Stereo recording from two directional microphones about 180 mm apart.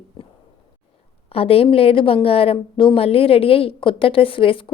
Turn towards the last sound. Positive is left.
turn(degrees=30)  # may be behind; listen again after turning